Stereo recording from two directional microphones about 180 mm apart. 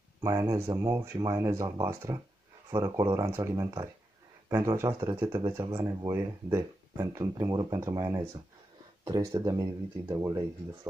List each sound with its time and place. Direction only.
0.2 s speech: 20° right (ahead or behind)